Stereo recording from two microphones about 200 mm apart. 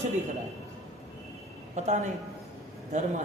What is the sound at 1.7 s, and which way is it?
Speech, 35° right (ahead or behind).